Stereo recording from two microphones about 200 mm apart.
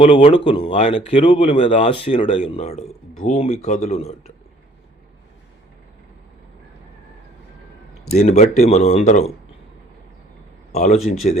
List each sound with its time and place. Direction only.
0.0 s speech: 30° left (ahead or behind)
8.1 s speech: 35° left (ahead or behind)
10.7 s speech: 35° left (ahead or behind)